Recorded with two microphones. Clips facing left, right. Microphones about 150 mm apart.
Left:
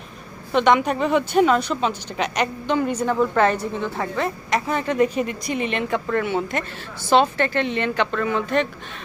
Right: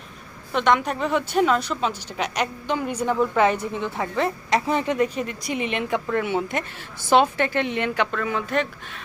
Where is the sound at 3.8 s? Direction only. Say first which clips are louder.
Right 2 dB; 20° right (ahead or behind).